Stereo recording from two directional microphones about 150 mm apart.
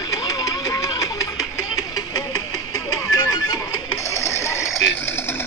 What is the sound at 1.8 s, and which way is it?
Music, 25° left (ahead or behind).